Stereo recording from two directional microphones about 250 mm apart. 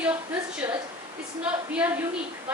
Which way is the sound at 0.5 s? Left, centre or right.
Centre.